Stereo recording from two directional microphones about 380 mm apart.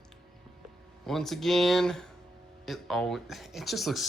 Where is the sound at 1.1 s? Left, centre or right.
Centre.